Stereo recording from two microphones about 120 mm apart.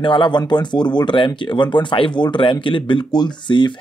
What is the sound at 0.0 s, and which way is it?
Speech, 45° left (ahead or behind).